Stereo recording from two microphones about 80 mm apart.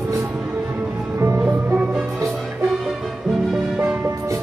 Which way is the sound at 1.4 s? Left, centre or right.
Centre.